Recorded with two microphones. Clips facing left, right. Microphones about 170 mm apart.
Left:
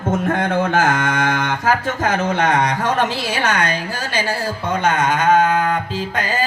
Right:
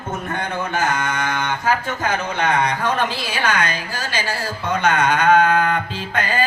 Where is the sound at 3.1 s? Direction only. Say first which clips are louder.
Left 2 dB; 70° left (ahead or behind).